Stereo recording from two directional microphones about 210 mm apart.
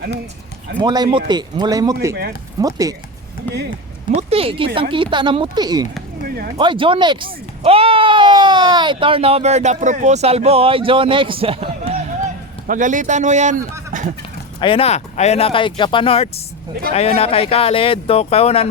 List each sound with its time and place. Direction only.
0.8 s speech: 20° right (ahead or behind)
4.1 s speech: 30° right (ahead or behind)
6.2 s speech: 45° right (ahead or behind)
6.6 s speech: 25° right (ahead or behind)
12.6 s a man's voice: 40° right (ahead or behind)
14.6 s speech: 25° left (ahead or behind)